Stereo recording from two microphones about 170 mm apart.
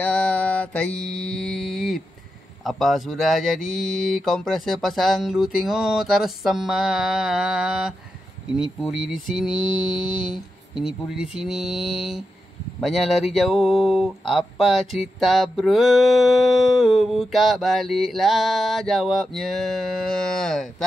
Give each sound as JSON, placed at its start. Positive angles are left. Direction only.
{"t": 0.0, "sound": "mantra", "side_deg": 5}
{"t": 2.6, "sound": "speech", "side_deg": 0}
{"t": 9.5, "sound": "mantra", "side_deg": 30}
{"t": 10.3, "sound": "speech", "side_deg": -5}